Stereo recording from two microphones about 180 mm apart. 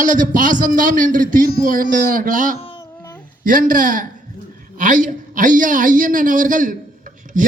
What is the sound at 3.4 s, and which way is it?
A woman's voice, 50° right (ahead or behind).